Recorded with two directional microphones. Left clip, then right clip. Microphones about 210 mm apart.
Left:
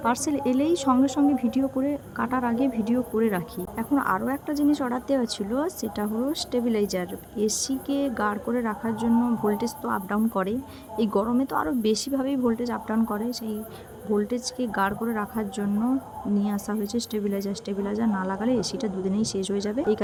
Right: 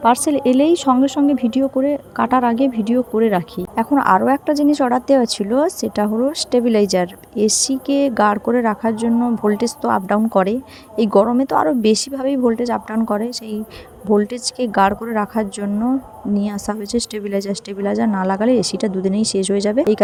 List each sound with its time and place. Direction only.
0.0 s a woman's voice: 30° right (ahead or behind)